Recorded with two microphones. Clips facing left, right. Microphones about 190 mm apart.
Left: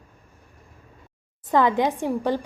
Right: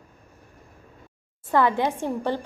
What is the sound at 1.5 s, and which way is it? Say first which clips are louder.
Speech: left 1 dB; 15° left (ahead or behind).